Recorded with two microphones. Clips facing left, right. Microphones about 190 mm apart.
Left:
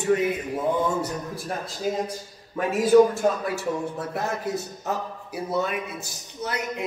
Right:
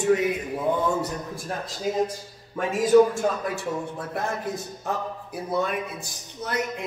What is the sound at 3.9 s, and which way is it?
Speech, 5° left (ahead or behind).